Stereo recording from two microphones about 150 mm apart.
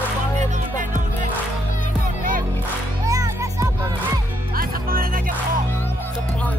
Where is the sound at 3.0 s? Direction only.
20° right (ahead or behind).